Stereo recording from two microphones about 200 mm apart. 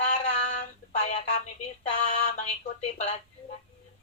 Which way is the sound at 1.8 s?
35° left (ahead or behind).